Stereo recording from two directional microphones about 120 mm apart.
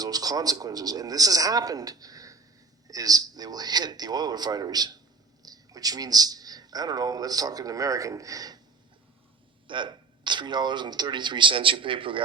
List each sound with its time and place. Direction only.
0.0 s speech: 30° right (ahead or behind)
9.6 s speech: 40° right (ahead or behind)